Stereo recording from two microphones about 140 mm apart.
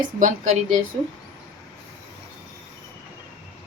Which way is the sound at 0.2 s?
65° right (ahead or behind).